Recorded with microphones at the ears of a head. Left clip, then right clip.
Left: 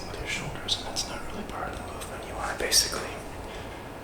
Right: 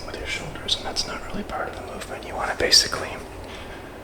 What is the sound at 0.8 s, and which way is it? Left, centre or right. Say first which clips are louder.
Speech: right 5 dB; right.